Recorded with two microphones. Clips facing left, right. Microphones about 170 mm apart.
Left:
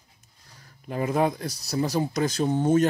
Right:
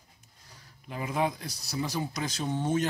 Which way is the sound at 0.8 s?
45° left (ahead or behind).